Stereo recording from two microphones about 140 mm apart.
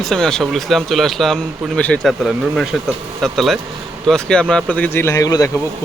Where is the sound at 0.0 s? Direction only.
5° left (ahead or behind).